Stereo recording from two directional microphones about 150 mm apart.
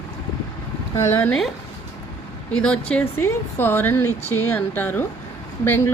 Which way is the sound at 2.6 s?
5° left (ahead or behind).